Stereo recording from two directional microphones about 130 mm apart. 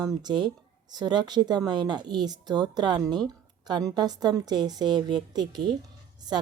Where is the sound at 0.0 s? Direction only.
30° right (ahead or behind).